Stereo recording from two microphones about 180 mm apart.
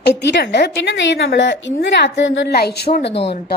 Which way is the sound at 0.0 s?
75° left (ahead or behind).